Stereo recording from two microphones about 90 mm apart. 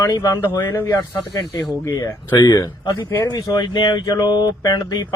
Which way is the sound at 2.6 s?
40° left (ahead or behind).